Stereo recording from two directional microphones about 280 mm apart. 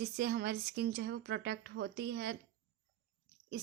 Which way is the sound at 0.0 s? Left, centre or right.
Right.